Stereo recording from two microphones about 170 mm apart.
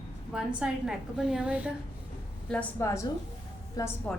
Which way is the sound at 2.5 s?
10° left (ahead or behind).